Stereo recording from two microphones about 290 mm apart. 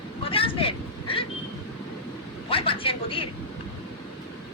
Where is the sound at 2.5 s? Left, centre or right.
Centre.